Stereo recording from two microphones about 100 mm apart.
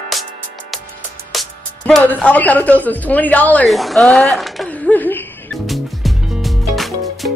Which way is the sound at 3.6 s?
Centre (ahead or behind).